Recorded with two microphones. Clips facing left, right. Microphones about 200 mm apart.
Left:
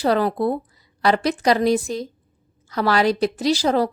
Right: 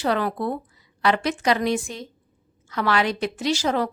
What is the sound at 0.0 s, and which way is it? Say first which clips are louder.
A woman's voice: left 4 dB; 35° left (ahead or behind).